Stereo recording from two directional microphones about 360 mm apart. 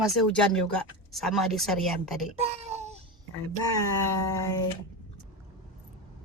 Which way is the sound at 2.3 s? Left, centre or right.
Centre.